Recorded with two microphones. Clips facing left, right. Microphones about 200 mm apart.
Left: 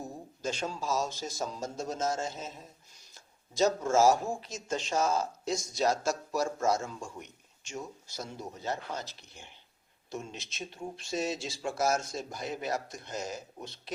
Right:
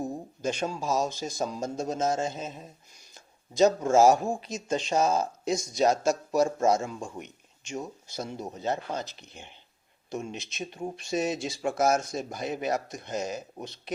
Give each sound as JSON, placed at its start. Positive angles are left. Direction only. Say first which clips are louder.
{"t": 0.4, "sound": "speech", "louder": "right 4 dB", "side_deg": -15}